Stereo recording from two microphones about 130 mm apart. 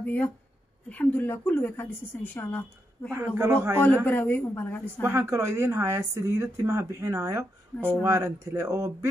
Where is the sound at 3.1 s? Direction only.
20° right (ahead or behind).